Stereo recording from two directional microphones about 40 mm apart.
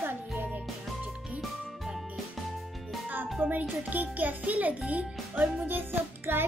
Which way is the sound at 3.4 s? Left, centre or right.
Right.